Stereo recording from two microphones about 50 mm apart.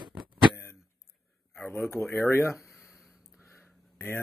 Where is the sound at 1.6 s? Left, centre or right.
Left.